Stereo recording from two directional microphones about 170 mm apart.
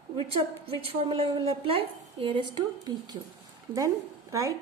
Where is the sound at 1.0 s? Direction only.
30° right (ahead or behind).